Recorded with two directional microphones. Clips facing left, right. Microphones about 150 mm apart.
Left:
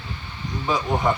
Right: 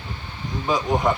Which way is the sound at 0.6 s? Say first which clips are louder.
Right 1 dB; centre (ahead or behind).